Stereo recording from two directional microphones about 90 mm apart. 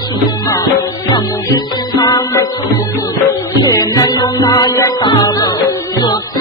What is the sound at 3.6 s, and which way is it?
Music, 40° left (ahead or behind).